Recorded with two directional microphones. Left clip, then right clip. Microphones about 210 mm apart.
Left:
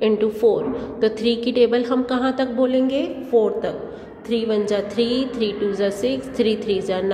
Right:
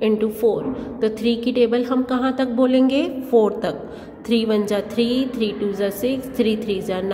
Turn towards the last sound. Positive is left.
turn(degrees=-15)  # may be behind; listen again after turning